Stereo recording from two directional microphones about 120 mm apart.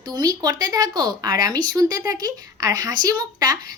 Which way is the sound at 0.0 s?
35° right (ahead or behind).